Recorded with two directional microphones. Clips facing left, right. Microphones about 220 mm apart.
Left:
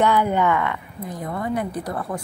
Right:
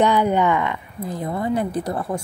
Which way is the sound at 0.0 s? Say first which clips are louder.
Right 2 dB; 20° right (ahead or behind).